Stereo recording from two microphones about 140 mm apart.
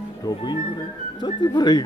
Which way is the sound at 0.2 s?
30° left (ahead or behind).